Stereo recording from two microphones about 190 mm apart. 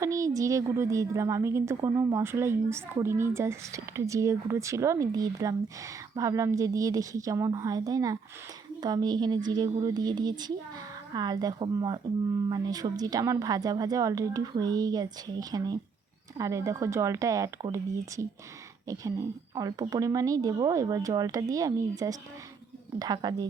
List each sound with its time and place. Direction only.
0.0 s a woman's voice: 15° right (ahead or behind)